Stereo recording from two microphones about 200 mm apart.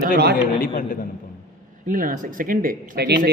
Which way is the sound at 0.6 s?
45° left (ahead or behind).